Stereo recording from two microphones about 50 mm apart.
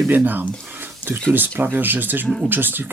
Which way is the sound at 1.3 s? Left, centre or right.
Right.